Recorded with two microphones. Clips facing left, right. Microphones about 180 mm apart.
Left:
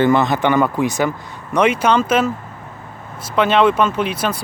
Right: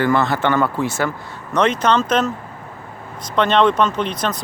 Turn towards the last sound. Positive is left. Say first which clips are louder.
# left 2 dB
turn(degrees=10)  # may be behind; listen again after turning